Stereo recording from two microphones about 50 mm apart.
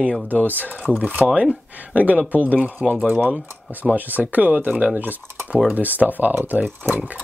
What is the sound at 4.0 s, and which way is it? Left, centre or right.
Speech, right.